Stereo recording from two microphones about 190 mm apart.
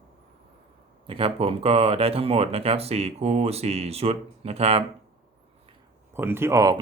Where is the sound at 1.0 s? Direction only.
30° right (ahead or behind).